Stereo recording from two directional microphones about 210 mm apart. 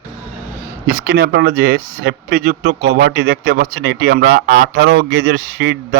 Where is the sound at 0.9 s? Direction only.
45° right (ahead or behind).